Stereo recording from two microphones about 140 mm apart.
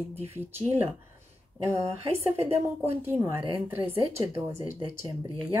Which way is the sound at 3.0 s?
15° right (ahead or behind).